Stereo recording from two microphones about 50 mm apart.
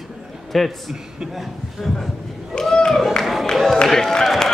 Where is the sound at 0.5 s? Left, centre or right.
Centre.